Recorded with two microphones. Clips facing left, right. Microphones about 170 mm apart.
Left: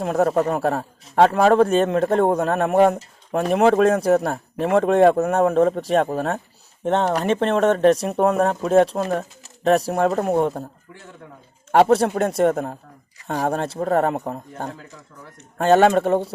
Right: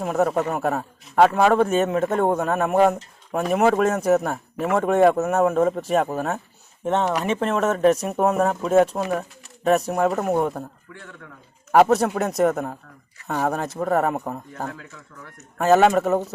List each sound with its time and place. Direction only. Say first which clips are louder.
0.0 s a man's voice: left 2 dB; 35° left (ahead or behind)
11.7 s speech: left 1 dB; 30° left (ahead or behind)
14.8 s speech: even; 15° left (ahead or behind)
15.4 s a man's voice: left 1 dB; 30° left (ahead or behind)